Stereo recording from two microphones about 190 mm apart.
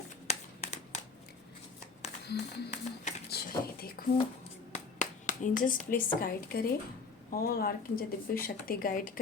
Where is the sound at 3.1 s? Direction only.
40° left (ahead or behind).